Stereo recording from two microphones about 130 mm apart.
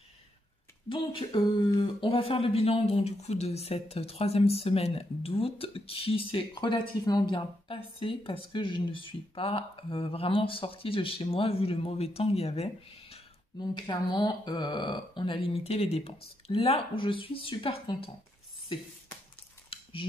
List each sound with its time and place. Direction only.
0.8 s speech: 40° left (ahead or behind)
13.6 s speech: 35° left (ahead or behind)
19.7 s a sound: 45° left (ahead or behind)